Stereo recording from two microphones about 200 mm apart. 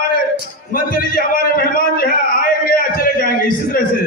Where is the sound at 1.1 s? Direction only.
45° left (ahead or behind).